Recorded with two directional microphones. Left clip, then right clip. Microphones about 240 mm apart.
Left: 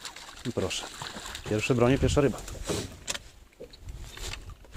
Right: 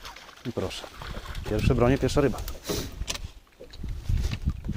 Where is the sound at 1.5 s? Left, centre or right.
Centre.